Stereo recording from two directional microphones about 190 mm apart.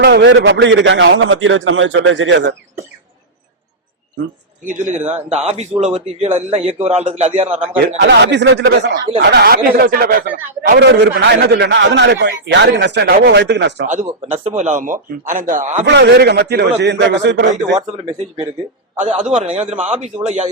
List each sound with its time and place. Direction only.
0.0 s a man's voice: 65° right (ahead or behind)
4.6 s a man's voice: 40° right (ahead or behind)
7.9 s a man's voice: 60° right (ahead or behind)
9.3 s a man's voice: 55° right (ahead or behind)
13.8 s a man's voice: 35° right (ahead or behind)
15.9 s a man's voice: 65° right (ahead or behind)
19.1 s a man's voice: 40° right (ahead or behind)